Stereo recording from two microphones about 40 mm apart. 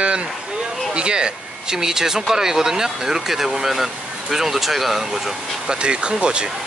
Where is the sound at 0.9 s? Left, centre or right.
Right; by 5.3 s centre.